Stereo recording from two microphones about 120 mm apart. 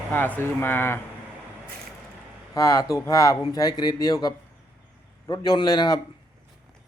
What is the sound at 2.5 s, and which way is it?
Speech, 30° left (ahead or behind).